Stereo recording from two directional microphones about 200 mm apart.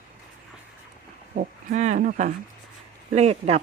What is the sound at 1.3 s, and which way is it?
Speech, 35° right (ahead or behind).